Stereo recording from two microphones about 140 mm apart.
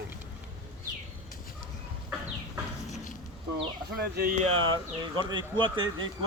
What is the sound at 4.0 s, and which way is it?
Speech, 90° right.